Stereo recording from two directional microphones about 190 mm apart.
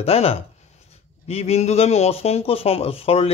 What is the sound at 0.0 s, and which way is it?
Speech, 30° left (ahead or behind).